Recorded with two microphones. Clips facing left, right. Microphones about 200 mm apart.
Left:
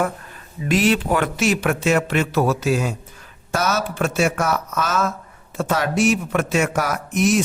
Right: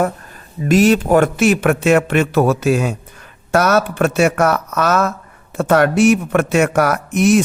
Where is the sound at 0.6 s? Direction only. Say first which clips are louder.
Right 6 dB; 45° right (ahead or behind).